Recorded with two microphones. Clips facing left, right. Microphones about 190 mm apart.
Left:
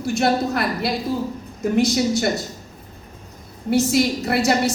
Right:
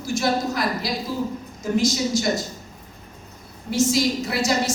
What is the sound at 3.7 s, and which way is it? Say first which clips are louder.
A woman's voice: left 3 dB; 60° left (ahead or behind).